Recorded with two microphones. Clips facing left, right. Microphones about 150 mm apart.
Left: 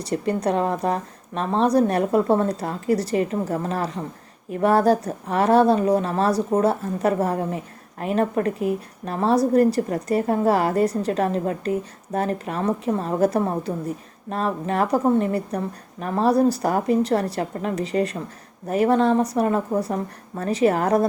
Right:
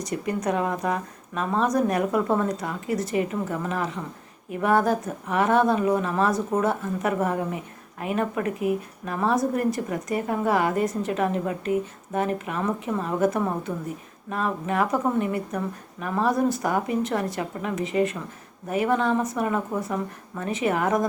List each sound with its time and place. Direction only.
0.0 s a woman's voice: 30° left (ahead or behind)